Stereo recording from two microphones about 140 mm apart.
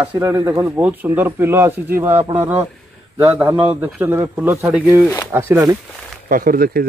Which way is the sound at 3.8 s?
15° right (ahead or behind).